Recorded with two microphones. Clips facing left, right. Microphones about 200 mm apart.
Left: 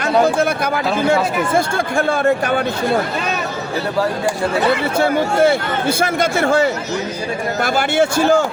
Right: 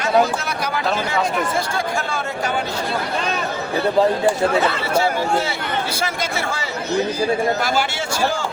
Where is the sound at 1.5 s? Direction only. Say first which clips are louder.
Left 5 dB; 55° left (ahead or behind).